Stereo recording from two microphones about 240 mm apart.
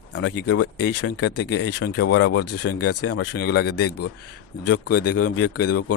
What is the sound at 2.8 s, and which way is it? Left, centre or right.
Speech, left.